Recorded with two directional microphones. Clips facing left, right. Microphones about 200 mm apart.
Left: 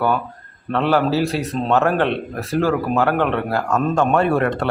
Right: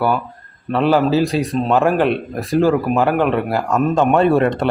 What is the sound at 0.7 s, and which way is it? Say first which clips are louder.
Speech: right 3 dB; 15° right (ahead or behind).